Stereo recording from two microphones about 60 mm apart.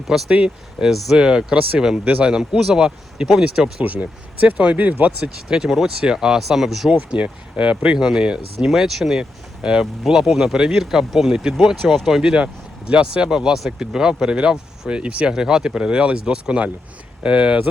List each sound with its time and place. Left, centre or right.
0.3 s speech: centre
0.9 s speech: centre
3.8 s speech: right
5.5 s speech: centre
7.1 s speech: right